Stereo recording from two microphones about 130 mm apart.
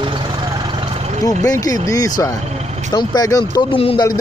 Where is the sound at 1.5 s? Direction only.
30° left (ahead or behind).